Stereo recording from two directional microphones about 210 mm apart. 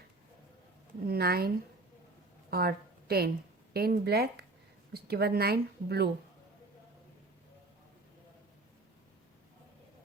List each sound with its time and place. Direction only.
1.0 s a woman's voice: 45° right (ahead or behind)